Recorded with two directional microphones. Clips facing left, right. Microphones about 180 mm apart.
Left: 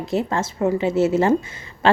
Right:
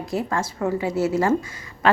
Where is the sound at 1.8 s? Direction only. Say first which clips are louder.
Left 2 dB; 30° left (ahead or behind).